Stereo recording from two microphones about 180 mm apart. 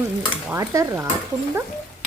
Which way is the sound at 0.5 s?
15° right (ahead or behind).